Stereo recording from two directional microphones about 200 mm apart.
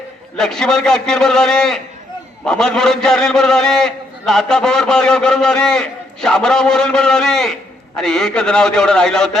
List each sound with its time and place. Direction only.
0.3 s a man's voice: centre (ahead or behind)